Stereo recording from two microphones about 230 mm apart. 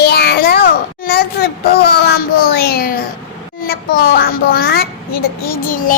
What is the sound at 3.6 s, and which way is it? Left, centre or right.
A child's voice, left.